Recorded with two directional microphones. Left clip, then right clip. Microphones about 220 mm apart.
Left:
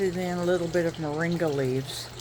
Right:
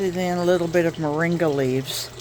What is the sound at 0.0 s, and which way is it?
Speech, 30° right (ahead or behind).